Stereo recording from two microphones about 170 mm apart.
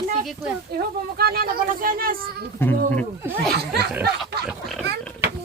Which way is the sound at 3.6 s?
70° right (ahead or behind).